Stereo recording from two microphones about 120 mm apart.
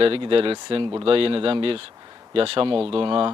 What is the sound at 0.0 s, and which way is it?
Speech, 50° right (ahead or behind).